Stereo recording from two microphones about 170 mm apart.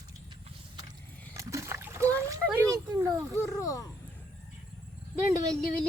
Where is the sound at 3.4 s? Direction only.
20° left (ahead or behind).